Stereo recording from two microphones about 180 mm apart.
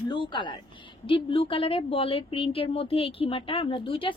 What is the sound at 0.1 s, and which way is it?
Speech, 25° left (ahead or behind).